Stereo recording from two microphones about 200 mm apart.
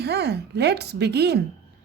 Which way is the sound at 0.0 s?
55° right (ahead or behind).